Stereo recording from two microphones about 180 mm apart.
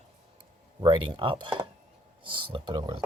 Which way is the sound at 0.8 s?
25° right (ahead or behind).